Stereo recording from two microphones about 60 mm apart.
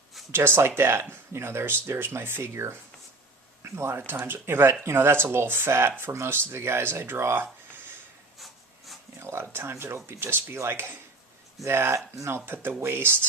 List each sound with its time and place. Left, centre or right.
0.3 s speech: right
9.1 s speech: right